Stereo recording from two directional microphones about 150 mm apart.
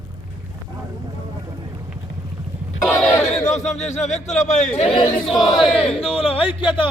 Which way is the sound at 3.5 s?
50° left (ahead or behind).